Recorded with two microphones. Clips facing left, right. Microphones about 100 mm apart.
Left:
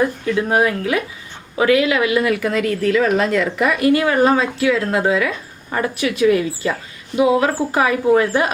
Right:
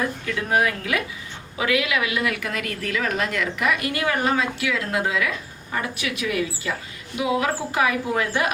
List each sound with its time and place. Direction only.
0.3 s a woman's voice: 30° left (ahead or behind)